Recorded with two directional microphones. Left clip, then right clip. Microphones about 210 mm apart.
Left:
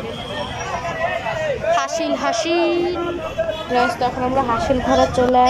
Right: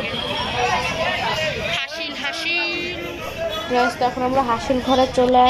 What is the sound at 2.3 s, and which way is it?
Speech, 30° left (ahead or behind).